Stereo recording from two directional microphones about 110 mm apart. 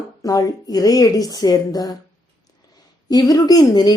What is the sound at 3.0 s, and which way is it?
Speech, 35° left (ahead or behind).